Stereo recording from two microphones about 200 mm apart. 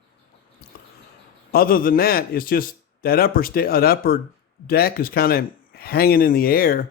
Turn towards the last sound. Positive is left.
turn(degrees=45)  # may be behind; listen again after turning